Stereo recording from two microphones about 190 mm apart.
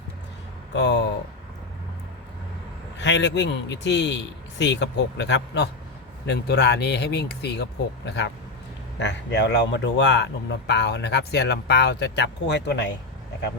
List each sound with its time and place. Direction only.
0.7 s a man's voice: 65° left (ahead or behind)
3.0 s a man's voice: 70° left (ahead or behind)